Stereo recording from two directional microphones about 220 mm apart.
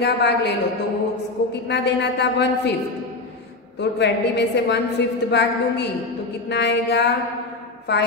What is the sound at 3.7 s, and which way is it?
A woman's voice, 50° left (ahead or behind).